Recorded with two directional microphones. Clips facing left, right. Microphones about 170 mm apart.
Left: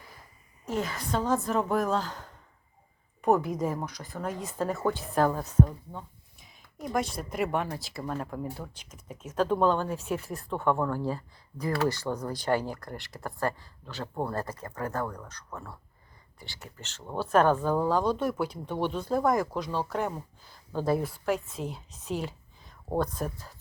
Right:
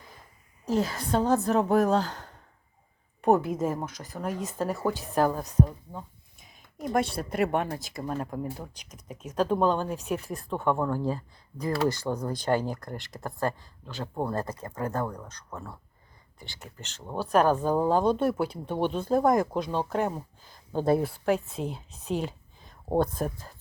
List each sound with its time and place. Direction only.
0.6 s a woman's voice: 35° right (ahead or behind)
3.2 s speech: 30° right (ahead or behind); by 6.1 s 10° right (ahead or behind)
6.6 s a sound: 25° right (ahead or behind)
7.0 s speech: 60° right (ahead or behind)
7.9 s speech: 15° right (ahead or behind)
18.6 s speech: 15° right (ahead or behind)
22.2 s a sound: 25° right (ahead or behind)